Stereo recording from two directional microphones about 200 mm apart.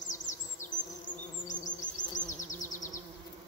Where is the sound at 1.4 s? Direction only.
40° left (ahead or behind).